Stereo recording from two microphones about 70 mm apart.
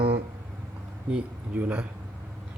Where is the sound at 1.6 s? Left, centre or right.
Right.